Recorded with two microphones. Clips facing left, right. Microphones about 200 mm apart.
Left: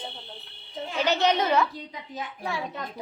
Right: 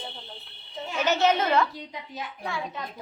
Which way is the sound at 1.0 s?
15° left (ahead or behind).